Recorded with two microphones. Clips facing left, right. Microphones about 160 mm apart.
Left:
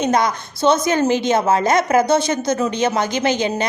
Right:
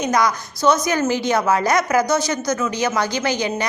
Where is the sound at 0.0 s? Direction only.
25° left (ahead or behind).